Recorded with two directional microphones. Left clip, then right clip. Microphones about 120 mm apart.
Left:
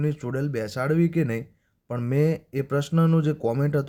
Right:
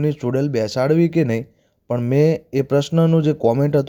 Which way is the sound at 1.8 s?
15° right (ahead or behind).